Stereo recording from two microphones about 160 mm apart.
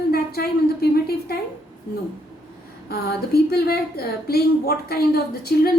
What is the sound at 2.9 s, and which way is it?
A woman's voice, 75° left (ahead or behind).